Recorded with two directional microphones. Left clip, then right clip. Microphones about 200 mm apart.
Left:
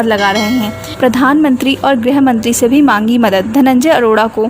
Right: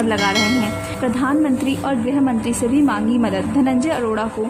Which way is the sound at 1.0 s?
55° left (ahead or behind).